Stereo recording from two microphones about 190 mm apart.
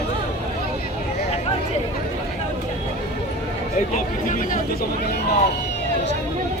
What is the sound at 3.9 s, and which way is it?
Speech, 45° left (ahead or behind).